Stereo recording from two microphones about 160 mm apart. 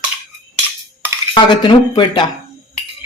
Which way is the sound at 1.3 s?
30° left (ahead or behind).